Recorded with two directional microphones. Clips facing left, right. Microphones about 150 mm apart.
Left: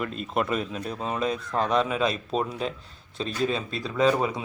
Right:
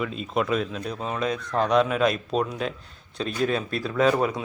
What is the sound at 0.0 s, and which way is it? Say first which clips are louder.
Speech: right 1 dB; centre (ahead or behind).